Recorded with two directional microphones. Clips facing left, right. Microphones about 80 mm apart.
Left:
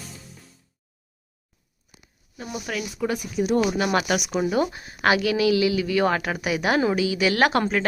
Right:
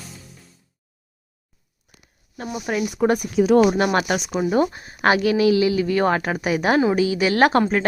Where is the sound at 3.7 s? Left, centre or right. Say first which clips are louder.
Right 3 dB; right.